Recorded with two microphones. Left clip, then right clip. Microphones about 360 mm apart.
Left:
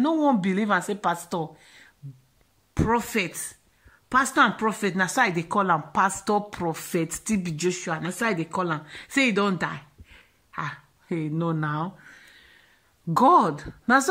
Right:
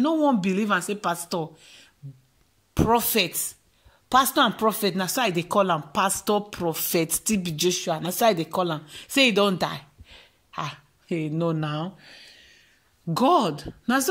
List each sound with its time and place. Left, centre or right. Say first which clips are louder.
0.0 s a woman's voice: even; centre